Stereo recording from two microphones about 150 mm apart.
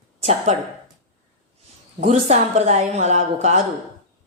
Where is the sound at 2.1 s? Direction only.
50° right (ahead or behind).